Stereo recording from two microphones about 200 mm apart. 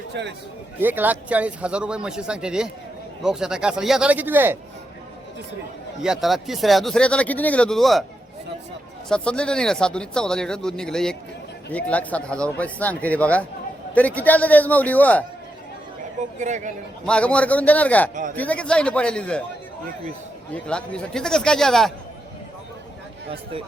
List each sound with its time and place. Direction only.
0.1 s a man's voice: 60° right (ahead or behind)
0.8 s speech: 10° right (ahead or behind)
6.0 s speech: centre (ahead or behind)
9.0 s speech: 5° left (ahead or behind)
16.4 s speech: 40° right (ahead or behind)
17.1 s speech: 5° left (ahead or behind)
18.1 s speech: 40° right (ahead or behind)
18.3 s speech: 5° left (ahead or behind)
20.7 s speech: 5° left (ahead or behind)